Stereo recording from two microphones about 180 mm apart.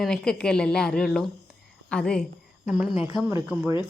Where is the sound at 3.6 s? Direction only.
10° right (ahead or behind).